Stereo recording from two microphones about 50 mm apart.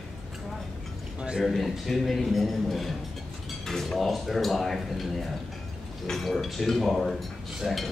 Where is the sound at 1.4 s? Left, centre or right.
Centre.